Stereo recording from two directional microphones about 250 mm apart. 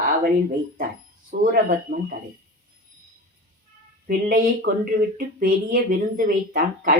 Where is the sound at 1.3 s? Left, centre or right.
Right.